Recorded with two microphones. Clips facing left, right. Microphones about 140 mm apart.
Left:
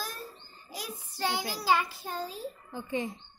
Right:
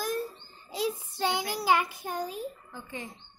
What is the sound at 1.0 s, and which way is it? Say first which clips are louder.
Child singing: right 2 dB; 20° right (ahead or behind).